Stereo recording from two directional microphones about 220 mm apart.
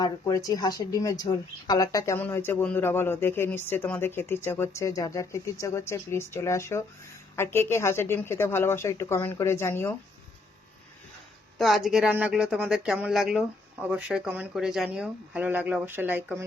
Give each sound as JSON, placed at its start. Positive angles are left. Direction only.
{"t": 0.0, "sound": "speech", "side_deg": 15}
{"t": 11.5, "sound": "speech", "side_deg": 0}